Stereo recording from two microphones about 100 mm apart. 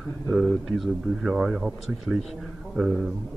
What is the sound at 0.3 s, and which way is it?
A man's voice, 5° right (ahead or behind).